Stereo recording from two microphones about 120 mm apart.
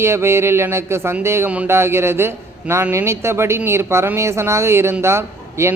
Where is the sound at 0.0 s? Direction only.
20° right (ahead or behind).